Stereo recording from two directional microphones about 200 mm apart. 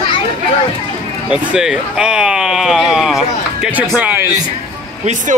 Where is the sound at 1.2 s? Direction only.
5° right (ahead or behind).